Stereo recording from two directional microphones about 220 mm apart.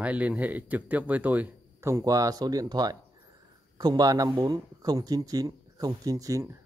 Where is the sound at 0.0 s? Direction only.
5° right (ahead or behind).